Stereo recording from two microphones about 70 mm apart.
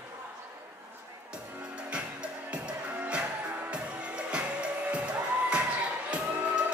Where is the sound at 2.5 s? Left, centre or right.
Centre.